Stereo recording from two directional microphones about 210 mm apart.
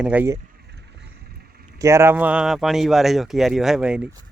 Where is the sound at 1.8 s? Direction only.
15° right (ahead or behind).